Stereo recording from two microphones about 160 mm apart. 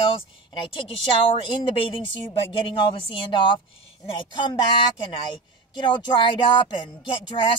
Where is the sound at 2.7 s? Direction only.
30° left (ahead or behind).